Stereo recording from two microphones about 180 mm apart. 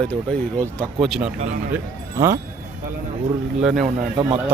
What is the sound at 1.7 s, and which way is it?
Speech, 15° right (ahead or behind).